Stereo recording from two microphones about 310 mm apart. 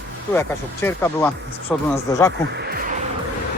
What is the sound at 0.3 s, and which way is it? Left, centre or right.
Speech, centre.